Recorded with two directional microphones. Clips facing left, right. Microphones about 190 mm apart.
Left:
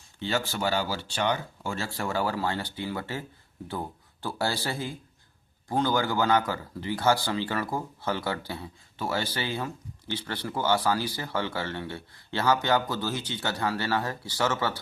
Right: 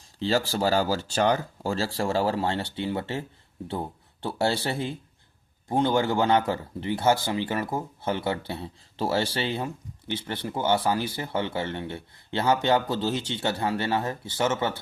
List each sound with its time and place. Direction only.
0.2 s speech: 35° right (ahead or behind)